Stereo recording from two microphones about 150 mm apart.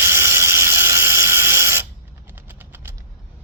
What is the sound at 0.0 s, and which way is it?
Ratchet, 15° right (ahead or behind).